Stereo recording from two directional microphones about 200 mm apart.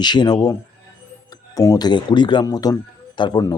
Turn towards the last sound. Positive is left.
turn(degrees=20)  # may be behind; listen again after turning